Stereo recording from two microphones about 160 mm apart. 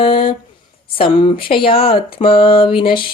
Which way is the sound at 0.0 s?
35° left (ahead or behind).